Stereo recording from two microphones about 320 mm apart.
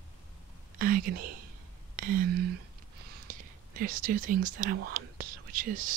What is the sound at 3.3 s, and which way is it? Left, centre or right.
Speech, right.